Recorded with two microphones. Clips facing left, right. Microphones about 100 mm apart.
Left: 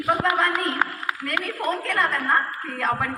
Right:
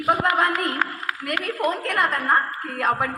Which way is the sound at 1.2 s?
15° right (ahead or behind).